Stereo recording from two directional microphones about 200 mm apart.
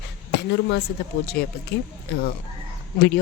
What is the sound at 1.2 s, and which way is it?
Speech, 50° left (ahead or behind).